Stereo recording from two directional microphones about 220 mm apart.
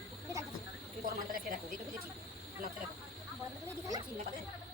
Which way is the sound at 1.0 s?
40° right (ahead or behind).